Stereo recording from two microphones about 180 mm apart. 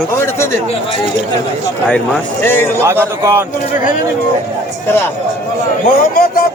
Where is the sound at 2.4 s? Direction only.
10° left (ahead or behind).